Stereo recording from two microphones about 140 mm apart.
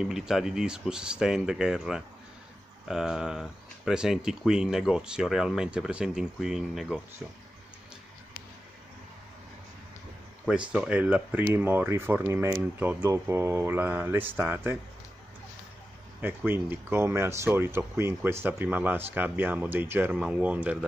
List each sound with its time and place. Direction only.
0.0 s speech: 5° right (ahead or behind)
10.7 s speech: 10° right (ahead or behind)
16.2 s speech: 15° right (ahead or behind)